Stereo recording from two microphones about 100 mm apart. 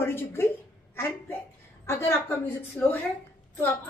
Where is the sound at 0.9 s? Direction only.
25° left (ahead or behind).